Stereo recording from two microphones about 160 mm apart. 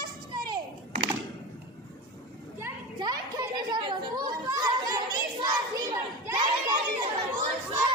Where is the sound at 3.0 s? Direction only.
25° right (ahead or behind).